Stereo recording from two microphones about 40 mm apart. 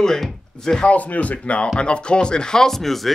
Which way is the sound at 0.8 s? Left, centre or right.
Left.